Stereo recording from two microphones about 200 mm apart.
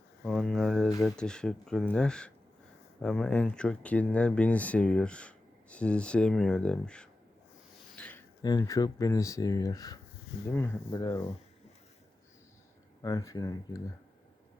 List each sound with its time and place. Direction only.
0.3 s speech: centre (ahead or behind)
7.9 s a sound: 5° left (ahead or behind)
8.4 s speech: 20° left (ahead or behind)
13.0 s speech: 15° left (ahead or behind)